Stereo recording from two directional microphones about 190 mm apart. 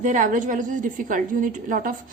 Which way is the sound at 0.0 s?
40° right (ahead or behind).